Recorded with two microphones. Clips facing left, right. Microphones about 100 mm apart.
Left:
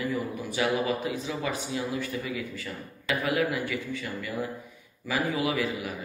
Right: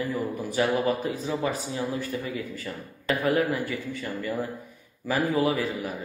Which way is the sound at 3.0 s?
40° right (ahead or behind).